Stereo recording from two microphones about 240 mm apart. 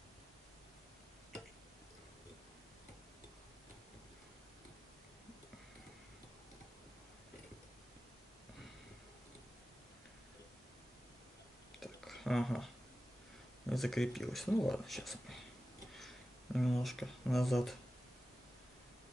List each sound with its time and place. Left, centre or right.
11.8 s a sound: centre
13.7 s speech: centre
16.5 s speech: centre